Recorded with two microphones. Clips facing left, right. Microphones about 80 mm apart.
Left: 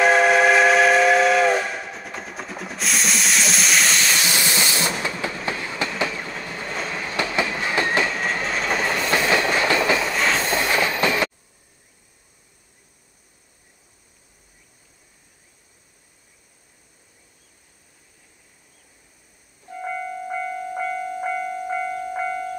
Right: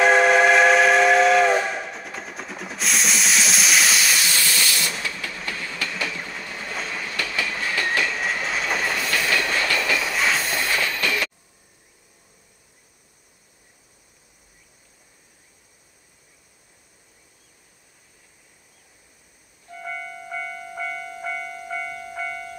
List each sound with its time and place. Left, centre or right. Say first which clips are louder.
0.0 s steam whistle: even; centre
4.2 s train: left 2 dB; left
6.6 s train: left 2 dB; centre
7.2 s train: left 5 dB; left
8.2 s train: left 1 dB; centre
8.9 s train: left 3 dB; left
10.0 s train: left 1 dB; centre
10.4 s train: left 4 dB; left
20.7 s train: left 4 dB; left